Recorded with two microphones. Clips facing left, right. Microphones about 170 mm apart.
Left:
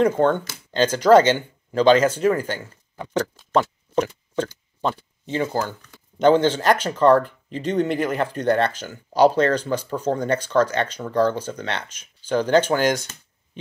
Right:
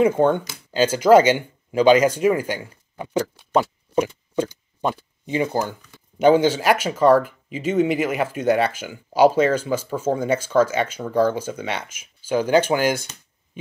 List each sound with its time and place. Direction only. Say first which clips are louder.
0.0 s speech: right 1 dB; 10° right (ahead or behind)